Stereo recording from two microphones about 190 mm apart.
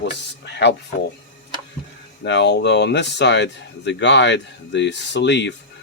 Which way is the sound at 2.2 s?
65° left (ahead or behind).